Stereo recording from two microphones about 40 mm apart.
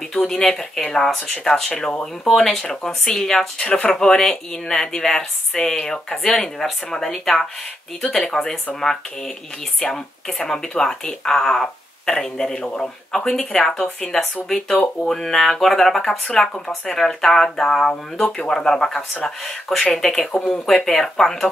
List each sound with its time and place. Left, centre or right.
0.1 s speech: centre
3.6 s speech: left
9.8 s speech: centre
15.0 s speech: centre